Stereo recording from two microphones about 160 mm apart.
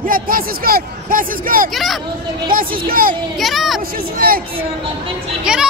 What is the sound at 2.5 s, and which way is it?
Speech, 60° right (ahead or behind).